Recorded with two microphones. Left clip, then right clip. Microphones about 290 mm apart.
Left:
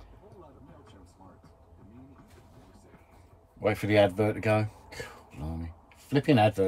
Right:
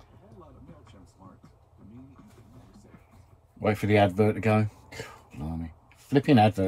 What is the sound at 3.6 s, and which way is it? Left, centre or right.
Speech, right.